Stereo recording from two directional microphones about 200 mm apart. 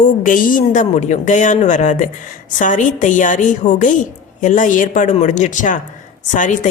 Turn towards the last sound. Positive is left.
turn(degrees=40)  # may be behind; listen again after turning